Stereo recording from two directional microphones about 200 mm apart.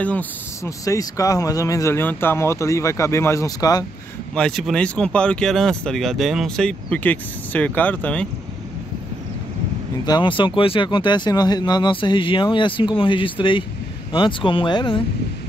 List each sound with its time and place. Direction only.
0.0 s speech: 10° left (ahead or behind)
4.4 s speech: centre (ahead or behind)
10.0 s speech: 20° left (ahead or behind)